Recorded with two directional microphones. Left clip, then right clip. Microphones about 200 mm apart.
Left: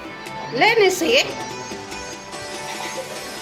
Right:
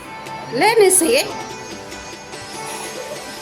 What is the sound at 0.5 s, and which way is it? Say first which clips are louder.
Speech: right 2 dB; 20° right (ahead or behind).